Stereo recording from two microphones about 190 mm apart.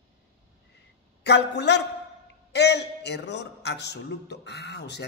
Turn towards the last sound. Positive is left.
turn(degrees=60)  # may be behind; listen again after turning